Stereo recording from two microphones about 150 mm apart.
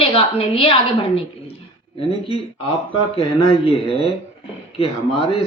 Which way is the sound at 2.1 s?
40° left (ahead or behind).